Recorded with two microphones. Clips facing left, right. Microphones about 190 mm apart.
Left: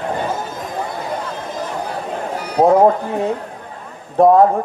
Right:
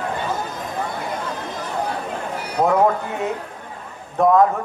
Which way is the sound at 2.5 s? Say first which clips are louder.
Left 6 dB; 30° left (ahead or behind).